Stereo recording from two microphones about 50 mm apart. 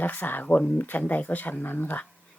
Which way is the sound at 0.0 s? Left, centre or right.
Left.